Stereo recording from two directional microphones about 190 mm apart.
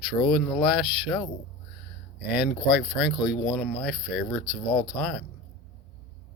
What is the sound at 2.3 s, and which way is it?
Speech, centre (ahead or behind).